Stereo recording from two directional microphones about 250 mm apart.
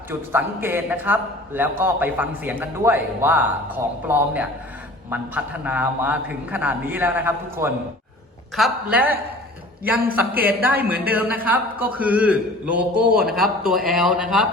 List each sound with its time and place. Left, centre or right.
0.1 s a man's voice: centre
10.2 s a man's voice: centre